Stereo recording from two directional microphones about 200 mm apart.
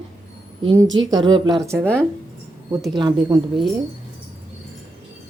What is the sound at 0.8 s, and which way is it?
Speech, 70° right (ahead or behind).